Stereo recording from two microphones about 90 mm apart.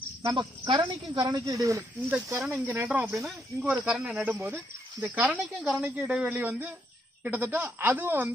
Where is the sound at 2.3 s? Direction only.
15° right (ahead or behind).